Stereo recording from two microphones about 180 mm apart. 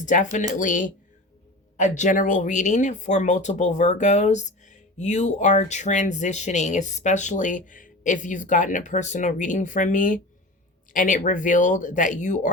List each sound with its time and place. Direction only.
0.0 s speech: 45° left (ahead or behind)